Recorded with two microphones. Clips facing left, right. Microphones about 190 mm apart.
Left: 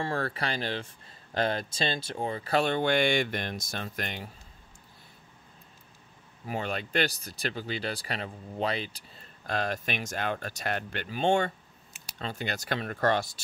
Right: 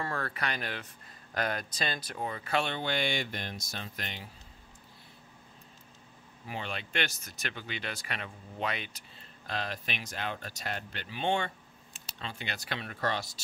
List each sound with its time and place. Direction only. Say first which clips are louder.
0.0 s speech: left 4 dB; 30° left (ahead or behind); by 4.3 s 50° left (ahead or behind)
6.4 s speech: left 6 dB; 45° left (ahead or behind)
9.5 s speech: left 6 dB; 50° left (ahead or behind)